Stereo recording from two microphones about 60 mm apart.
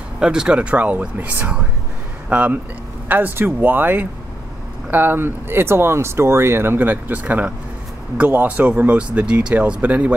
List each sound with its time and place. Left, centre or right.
0.2 s speech: centre; by 8.9 s right
8.9 s speech: centre